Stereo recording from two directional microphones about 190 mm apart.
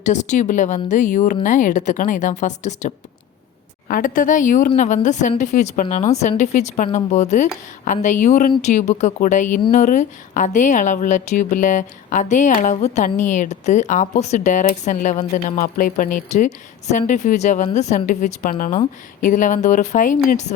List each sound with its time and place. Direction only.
0.0 s a woman's voice: 40° left (ahead or behind)